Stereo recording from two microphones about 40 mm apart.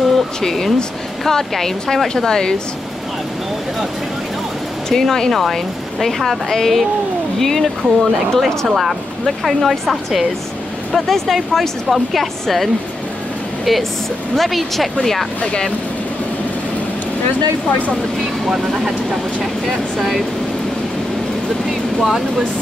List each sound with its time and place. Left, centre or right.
0.4 s speech: centre
4.8 s speech: centre
13.7 s speech: centre
17.6 s speech: left
19.6 s speech: centre